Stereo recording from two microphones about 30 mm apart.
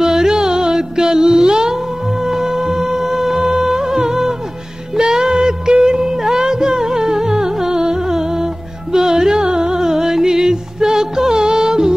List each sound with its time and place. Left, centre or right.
0.0 s music: centre